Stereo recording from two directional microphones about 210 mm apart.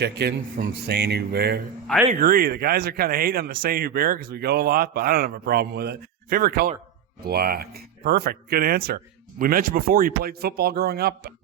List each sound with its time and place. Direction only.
0.0 s speech: 50° right (ahead or behind)